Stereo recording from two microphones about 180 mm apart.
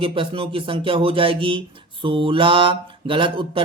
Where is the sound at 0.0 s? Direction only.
30° right (ahead or behind).